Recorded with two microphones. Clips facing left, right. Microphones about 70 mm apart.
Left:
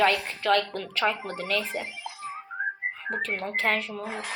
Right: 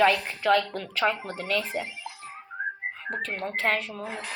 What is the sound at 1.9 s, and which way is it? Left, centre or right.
Music, left.